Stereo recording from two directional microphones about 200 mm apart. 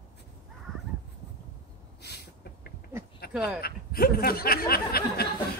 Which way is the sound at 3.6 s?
50° left (ahead or behind).